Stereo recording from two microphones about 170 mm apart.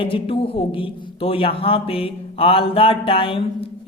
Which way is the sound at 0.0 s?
30° left (ahead or behind).